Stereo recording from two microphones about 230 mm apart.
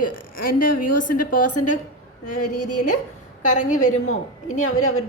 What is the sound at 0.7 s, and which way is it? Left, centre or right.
Speech, left.